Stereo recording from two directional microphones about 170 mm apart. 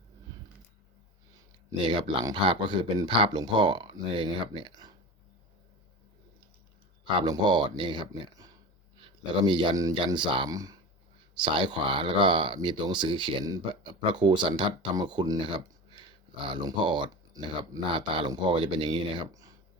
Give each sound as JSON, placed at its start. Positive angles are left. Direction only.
{"t": 1.9, "sound": "speech", "side_deg": -30}
{"t": 7.0, "sound": "speech", "side_deg": -25}